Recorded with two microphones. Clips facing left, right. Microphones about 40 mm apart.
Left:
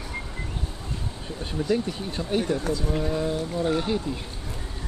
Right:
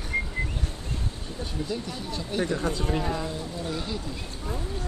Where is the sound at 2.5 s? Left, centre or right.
Right.